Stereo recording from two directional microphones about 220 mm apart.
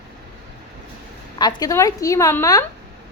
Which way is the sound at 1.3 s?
20° left (ahead or behind).